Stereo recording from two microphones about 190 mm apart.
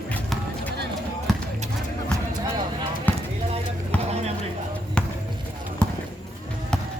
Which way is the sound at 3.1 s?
10° left (ahead or behind).